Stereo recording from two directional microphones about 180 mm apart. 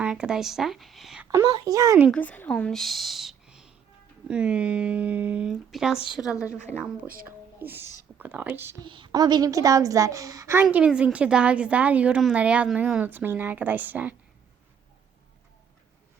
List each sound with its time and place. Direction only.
0.0 s speech: 5° right (ahead or behind)
1.3 s a woman's voice: 20° right (ahead or behind)
2.0 s a woman's voice: 10° left (ahead or behind); by 8.7 s 10° right (ahead or behind)
8.8 s a woman's voice: 25° right (ahead or behind); by 14.2 s 10° right (ahead or behind)